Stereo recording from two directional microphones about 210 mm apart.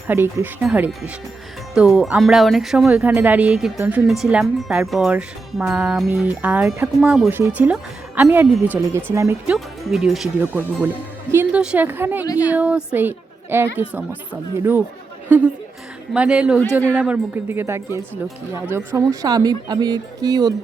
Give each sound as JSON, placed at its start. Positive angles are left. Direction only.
{"t": 0.1, "sound": "a woman's voice", "side_deg": -5}
{"t": 9.6, "sound": "a woman's voice", "side_deg": 0}
{"t": 12.2, "sound": "a woman's voice", "side_deg": 15}
{"t": 12.5, "sound": "a woman's voice", "side_deg": -5}